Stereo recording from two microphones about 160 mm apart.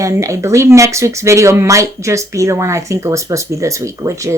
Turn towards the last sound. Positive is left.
turn(degrees=-20)  # may be behind; listen again after turning